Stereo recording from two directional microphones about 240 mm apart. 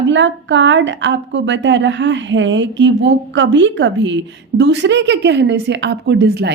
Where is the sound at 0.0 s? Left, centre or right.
Right.